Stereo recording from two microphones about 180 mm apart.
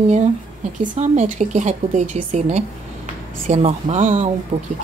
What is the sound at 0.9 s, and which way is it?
Speech, 40° right (ahead or behind).